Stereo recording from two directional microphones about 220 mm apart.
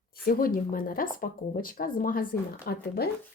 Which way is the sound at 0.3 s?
40° left (ahead or behind).